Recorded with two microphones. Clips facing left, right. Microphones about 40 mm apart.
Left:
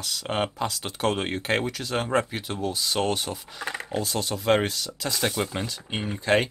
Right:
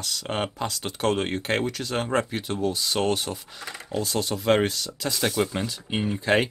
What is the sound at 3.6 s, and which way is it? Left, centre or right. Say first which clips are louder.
Speech: left 5 dB; left.